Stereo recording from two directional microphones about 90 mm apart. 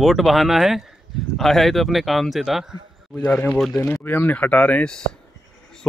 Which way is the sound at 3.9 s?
25° left (ahead or behind).